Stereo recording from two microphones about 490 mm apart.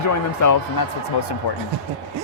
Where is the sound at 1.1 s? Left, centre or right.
Left.